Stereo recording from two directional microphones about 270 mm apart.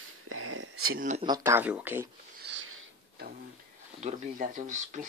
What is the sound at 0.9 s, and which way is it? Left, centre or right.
Speech, right.